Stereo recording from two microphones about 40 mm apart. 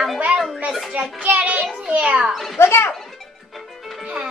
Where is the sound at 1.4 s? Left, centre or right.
Right.